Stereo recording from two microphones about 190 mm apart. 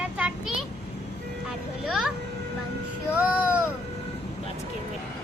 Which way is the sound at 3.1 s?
10° right (ahead or behind).